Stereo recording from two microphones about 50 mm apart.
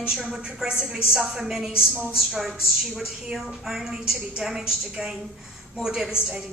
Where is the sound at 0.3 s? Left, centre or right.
Centre.